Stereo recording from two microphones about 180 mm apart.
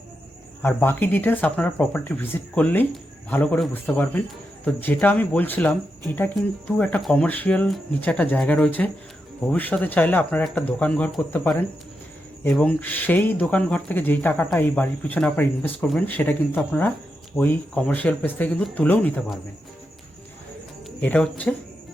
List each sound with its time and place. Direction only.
0.6 s speech: 10° left (ahead or behind)
21.0 s speech: 10° left (ahead or behind)